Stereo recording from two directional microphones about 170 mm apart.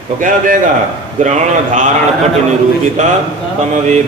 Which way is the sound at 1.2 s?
45° right (ahead or behind).